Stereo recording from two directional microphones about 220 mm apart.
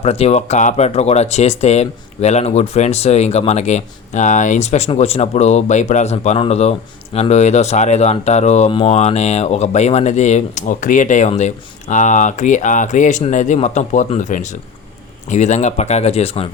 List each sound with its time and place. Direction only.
0.0 s speech: 30° left (ahead or behind)